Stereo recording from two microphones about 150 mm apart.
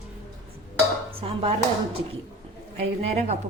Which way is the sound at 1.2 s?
40° right (ahead or behind).